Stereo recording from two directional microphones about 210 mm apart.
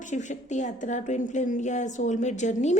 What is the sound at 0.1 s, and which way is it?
A woman's voice, 35° left (ahead or behind).